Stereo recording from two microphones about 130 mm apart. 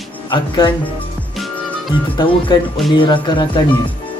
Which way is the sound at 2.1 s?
40° left (ahead or behind).